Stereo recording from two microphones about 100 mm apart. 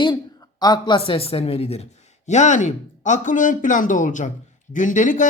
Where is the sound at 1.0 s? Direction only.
70° left (ahead or behind); by 1.8 s 90° left.